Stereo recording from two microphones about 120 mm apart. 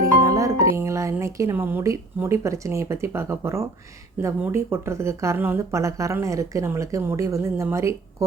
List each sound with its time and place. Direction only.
0.3 s music: 25° right (ahead or behind)
1.2 s speech: 20° right (ahead or behind)